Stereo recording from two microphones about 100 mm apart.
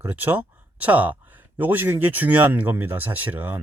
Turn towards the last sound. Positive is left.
turn(degrees=-20)  # may be behind; listen again after turning